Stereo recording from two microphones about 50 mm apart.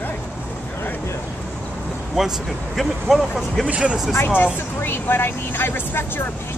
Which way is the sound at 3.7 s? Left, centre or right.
Right.